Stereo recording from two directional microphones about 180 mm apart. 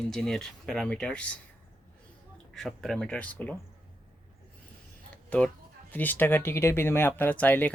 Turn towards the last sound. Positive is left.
turn(degrees=10)  # may be behind; listen again after turning